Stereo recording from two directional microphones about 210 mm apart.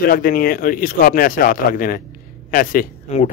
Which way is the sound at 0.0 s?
45° left (ahead or behind).